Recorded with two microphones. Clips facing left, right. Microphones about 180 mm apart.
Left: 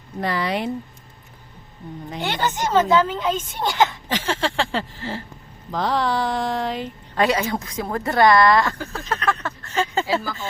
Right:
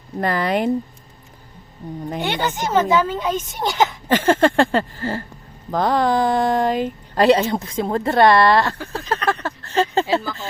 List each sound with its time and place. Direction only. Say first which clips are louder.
0.2 s speech: right 4 dB; 50° right (ahead or behind)
1.8 s a woman's voice: right 4 dB; 40° right (ahead or behind)
2.2 s a woman's voice: even; 10° right (ahead or behind)
4.1 s speech: right 9 dB; 50° right (ahead or behind)
7.2 s a woman's voice: right 5 dB; 30° right (ahead or behind)